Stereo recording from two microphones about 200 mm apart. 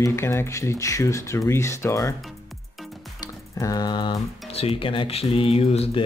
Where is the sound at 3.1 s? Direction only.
20° left (ahead or behind).